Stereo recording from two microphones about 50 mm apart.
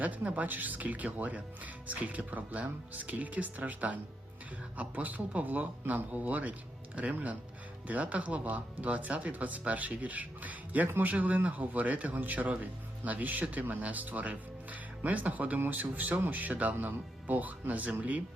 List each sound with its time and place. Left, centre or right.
0.0 s speech: right